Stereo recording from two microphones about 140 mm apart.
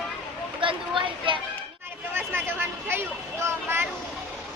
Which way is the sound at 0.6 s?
35° right (ahead or behind).